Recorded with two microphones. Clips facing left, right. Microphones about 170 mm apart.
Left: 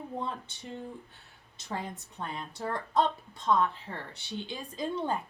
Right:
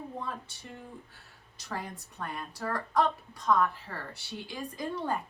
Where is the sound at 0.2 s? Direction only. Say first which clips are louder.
Left 2 dB; 20° left (ahead or behind).